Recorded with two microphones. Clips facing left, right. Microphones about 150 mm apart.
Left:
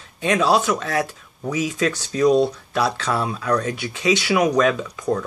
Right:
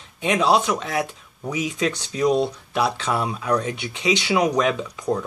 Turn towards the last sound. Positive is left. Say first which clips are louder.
# left 1 dB
turn(degrees=-20)  # may be behind; listen again after turning